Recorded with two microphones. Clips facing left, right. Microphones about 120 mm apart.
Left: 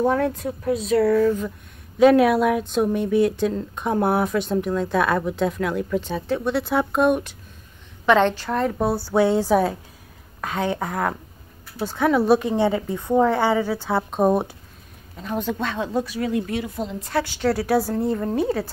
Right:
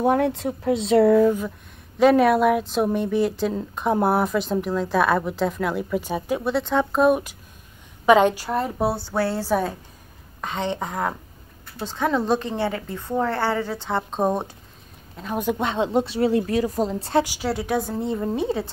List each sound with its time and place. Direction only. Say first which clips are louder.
0.0 s speech: right 1 dB; 20° right (ahead or behind)
2.0 s speech: left 1 dB; centre (ahead or behind)
6.5 s a woman's voice: right 1 dB; 5° left (ahead or behind)
9.1 s a woman's voice: left 5 dB; 15° left (ahead or behind); by 15.4 s centre (ahead or behind)
15.4 s speech: right 7 dB; 20° right (ahead or behind); by 17.1 s 40° right (ahead or behind)
17.1 s a woman's voice: right 2 dB; 15° right (ahead or behind)
17.4 s speech: left 4 dB; centre (ahead or behind)
17.9 s speech: left 2 dB; 5° right (ahead or behind)